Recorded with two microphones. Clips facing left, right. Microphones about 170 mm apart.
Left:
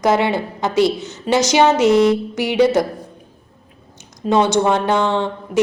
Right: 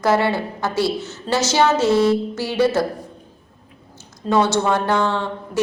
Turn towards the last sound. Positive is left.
turn(degrees=20)  # may be behind; listen again after turning